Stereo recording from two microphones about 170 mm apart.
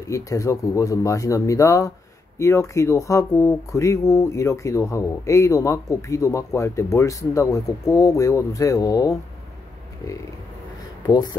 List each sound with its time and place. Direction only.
0.1 s speech: 20° left (ahead or behind)
11.1 s speech: 25° left (ahead or behind)